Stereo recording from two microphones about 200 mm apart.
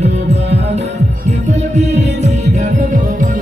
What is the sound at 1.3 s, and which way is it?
Music, 35° right (ahead or behind).